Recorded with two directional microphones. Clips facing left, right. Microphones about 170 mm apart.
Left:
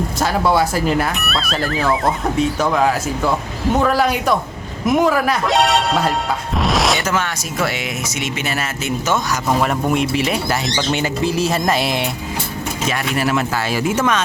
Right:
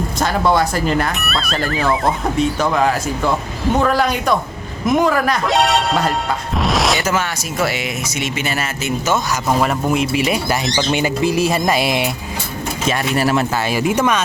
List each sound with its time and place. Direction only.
0.2 s speech: 5° left (ahead or behind)
10.2 s speech: 10° right (ahead or behind)
12.9 s speech: 35° right (ahead or behind)
13.6 s speech: 15° right (ahead or behind)